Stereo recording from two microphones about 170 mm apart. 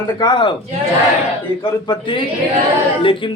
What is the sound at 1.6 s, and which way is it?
Speech, 30° left (ahead or behind).